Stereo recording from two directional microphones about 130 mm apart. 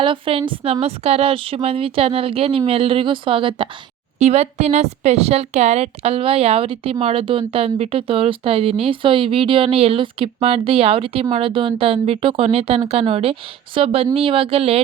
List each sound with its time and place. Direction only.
0.0 s speech: 45° right (ahead or behind)
4.2 s a woman's voice: 55° right (ahead or behind)